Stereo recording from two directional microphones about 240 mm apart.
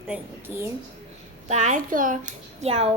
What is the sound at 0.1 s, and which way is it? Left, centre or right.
Speech, centre.